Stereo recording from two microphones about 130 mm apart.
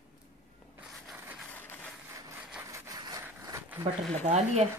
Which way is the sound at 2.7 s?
25° right (ahead or behind).